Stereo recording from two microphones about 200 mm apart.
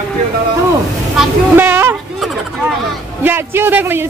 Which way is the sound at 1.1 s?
10° right (ahead or behind).